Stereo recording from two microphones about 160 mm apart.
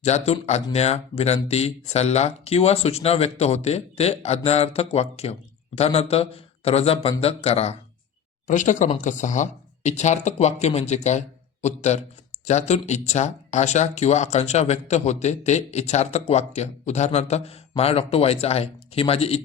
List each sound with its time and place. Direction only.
0.0 s speech: 45° left (ahead or behind)
8.4 s speech: 50° left (ahead or behind)